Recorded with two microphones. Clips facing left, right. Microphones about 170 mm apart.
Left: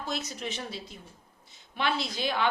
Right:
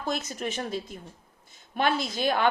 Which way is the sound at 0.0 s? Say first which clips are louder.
Right 4 dB; 50° right (ahead or behind).